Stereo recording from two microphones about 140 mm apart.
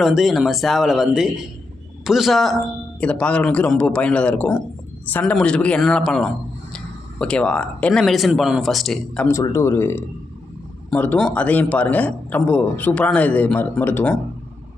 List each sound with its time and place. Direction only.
0.0 s a man's voice: centre (ahead or behind)
9.2 s a man's voice: 20° left (ahead or behind)